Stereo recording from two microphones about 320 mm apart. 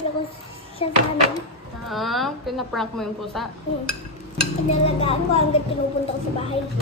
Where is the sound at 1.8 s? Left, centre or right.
Centre.